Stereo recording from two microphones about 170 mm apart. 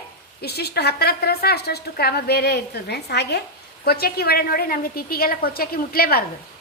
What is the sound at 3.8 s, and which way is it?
A woman's voice, 65° left (ahead or behind).